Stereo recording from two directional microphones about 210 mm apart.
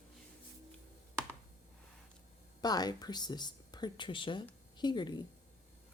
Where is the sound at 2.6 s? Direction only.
20° left (ahead or behind).